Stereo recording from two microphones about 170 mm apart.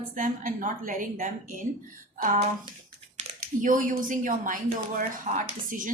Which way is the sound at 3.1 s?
50° right (ahead or behind).